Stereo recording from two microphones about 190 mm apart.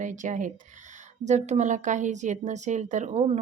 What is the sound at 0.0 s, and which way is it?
A woman's voice, 40° right (ahead or behind).